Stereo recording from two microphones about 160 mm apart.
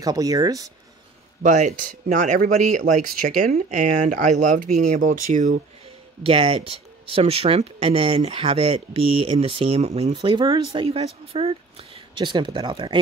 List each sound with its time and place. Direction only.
0.0 s speech: 25° right (ahead or behind)
1.4 s speech: 50° right (ahead or behind)
6.2 s speech: 35° right (ahead or behind)
10.1 s speech: 30° right (ahead or behind)